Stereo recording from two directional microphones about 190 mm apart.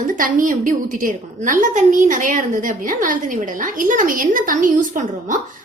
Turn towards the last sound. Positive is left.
turn(degrees=-45)  # may be behind; listen again after turning